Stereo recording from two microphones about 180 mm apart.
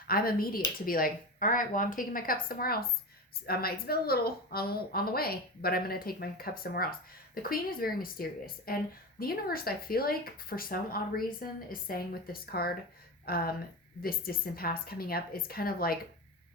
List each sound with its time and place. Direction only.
0.1 s a woman's voice: 55° left (ahead or behind)